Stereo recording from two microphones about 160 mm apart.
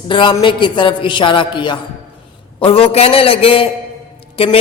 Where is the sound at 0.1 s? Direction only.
30° left (ahead or behind).